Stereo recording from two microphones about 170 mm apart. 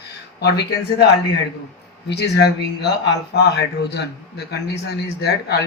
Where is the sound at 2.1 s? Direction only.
75° left (ahead or behind).